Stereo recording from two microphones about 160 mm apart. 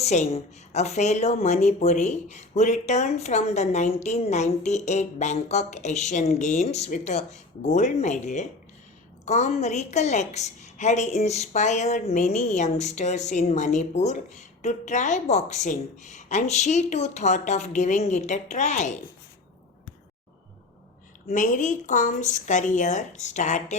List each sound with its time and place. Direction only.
0.0 s a woman's voice: 45° left (ahead or behind)
21.2 s a woman's voice: 55° left (ahead or behind)